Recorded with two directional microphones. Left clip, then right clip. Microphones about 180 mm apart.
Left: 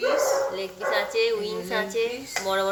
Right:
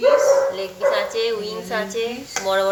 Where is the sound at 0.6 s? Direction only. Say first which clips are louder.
Right 6 dB; 5° left (ahead or behind).